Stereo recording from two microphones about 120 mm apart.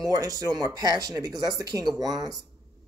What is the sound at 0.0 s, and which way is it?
Speech, 30° right (ahead or behind).